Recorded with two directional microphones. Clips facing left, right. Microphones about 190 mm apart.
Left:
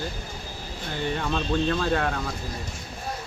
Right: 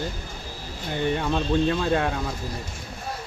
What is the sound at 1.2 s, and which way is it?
Speech, 15° right (ahead or behind).